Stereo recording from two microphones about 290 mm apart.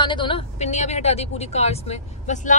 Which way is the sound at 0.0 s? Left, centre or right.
Centre.